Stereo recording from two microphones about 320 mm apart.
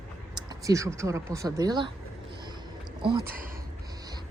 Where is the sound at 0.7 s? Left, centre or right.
Centre.